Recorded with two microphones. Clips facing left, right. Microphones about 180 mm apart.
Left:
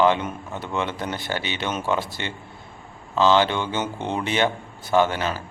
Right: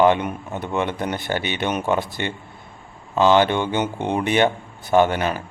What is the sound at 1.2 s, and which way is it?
Speech, 50° right (ahead or behind).